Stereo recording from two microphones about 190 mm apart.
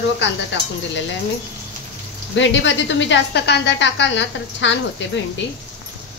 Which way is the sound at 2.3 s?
75° left (ahead or behind).